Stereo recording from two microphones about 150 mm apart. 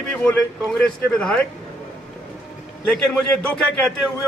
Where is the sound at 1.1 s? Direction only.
5° left (ahead or behind).